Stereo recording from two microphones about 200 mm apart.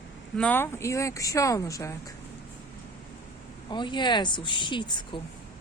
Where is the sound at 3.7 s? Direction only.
20° left (ahead or behind).